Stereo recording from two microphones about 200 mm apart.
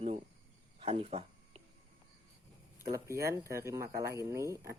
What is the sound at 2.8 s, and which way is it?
Speech, 15° right (ahead or behind).